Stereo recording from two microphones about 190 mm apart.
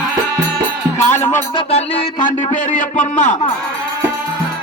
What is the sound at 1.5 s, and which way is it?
Speech, 30° left (ahead or behind).